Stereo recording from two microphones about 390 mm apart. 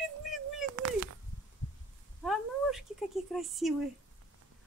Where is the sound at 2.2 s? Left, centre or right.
Centre.